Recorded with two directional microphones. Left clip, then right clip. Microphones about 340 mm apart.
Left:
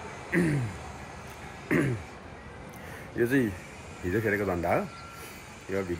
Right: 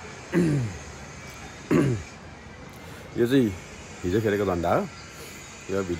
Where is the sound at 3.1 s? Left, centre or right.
Centre.